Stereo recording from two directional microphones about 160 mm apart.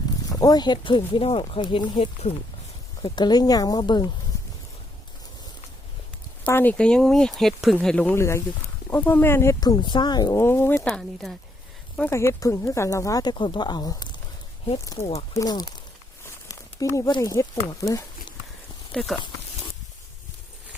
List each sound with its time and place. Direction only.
0.3 s speech: 25° left (ahead or behind)
3.0 s speech: 25° left (ahead or behind)
6.4 s speech: 10° left (ahead or behind)
10.8 s speech: centre (ahead or behind)
11.9 s speech: 15° left (ahead or behind)
14.9 s speech: 40° left (ahead or behind)
15.3 s speech: 20° left (ahead or behind)
18.9 s speech: centre (ahead or behind)